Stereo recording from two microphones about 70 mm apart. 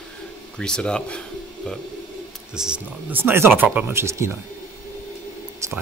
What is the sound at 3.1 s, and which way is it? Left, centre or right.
Speech, right.